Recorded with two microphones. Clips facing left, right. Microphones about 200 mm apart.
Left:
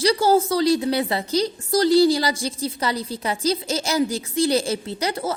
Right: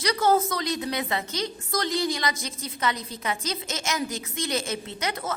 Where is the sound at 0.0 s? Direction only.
30° left (ahead or behind).